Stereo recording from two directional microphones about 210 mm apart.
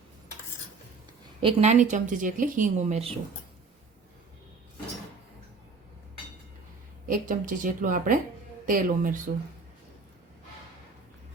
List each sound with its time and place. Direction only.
1.4 s speech: 30° right (ahead or behind)
7.1 s speech: 40° right (ahead or behind)